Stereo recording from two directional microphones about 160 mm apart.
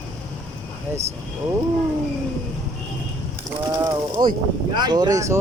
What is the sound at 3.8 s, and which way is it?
A woman's voice, 30° right (ahead or behind).